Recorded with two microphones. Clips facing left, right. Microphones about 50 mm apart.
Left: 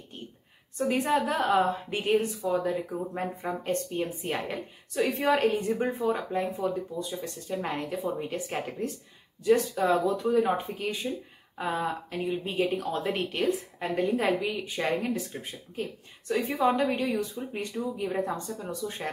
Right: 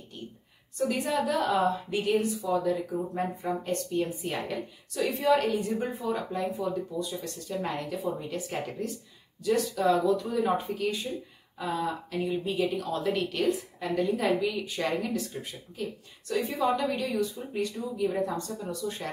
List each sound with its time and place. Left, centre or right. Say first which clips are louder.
0.7 s a woman's voice: left 2 dB; left
9.4 s a woman's voice: left 2 dB; left